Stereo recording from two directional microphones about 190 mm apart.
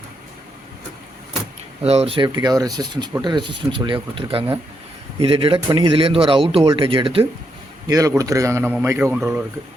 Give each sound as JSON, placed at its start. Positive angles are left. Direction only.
{"t": 1.8, "sound": "speech", "side_deg": -30}
{"t": 7.9, "sound": "speech", "side_deg": -15}